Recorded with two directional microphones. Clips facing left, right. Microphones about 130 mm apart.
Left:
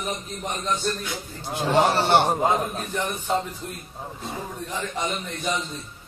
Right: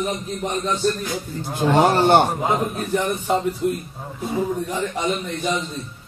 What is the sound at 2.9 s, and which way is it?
Speech, 10° right (ahead or behind).